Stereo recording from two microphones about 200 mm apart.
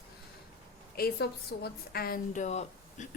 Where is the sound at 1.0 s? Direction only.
50° left (ahead or behind).